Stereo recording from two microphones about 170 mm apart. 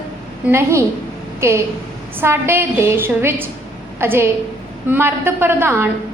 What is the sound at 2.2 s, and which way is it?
A woman's voice, 15° right (ahead or behind).